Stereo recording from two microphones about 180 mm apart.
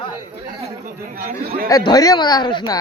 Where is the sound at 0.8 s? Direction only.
45° right (ahead or behind).